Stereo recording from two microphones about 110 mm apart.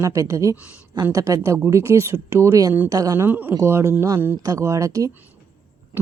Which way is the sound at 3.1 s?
20° right (ahead or behind).